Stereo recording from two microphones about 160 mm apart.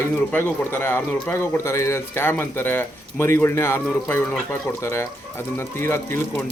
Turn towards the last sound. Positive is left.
turn(degrees=15)  # may be behind; listen again after turning